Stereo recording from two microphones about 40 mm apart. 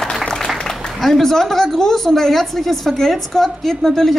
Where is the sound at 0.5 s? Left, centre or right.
Left.